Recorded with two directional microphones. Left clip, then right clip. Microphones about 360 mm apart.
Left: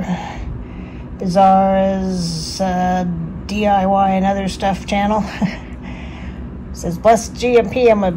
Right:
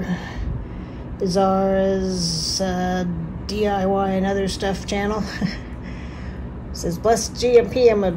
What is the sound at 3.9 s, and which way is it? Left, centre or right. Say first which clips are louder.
Speech: left 6 dB; right.